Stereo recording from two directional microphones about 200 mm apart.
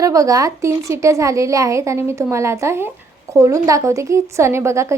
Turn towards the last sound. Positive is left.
turn(degrees=-15)  # may be behind; listen again after turning